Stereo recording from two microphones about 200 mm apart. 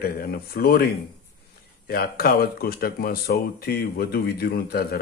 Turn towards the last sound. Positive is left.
turn(degrees=50)  # may be behind; listen again after turning